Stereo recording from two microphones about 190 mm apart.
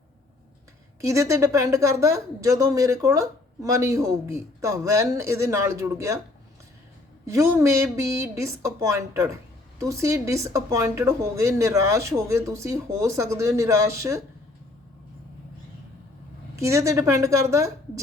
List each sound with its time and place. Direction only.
1.0 s speech: 15° right (ahead or behind)
7.3 s speech: 15° right (ahead or behind)
16.6 s speech: 15° right (ahead or behind)